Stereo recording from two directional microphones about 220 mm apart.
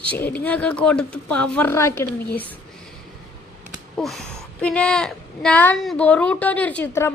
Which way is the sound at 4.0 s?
Centre (ahead or behind).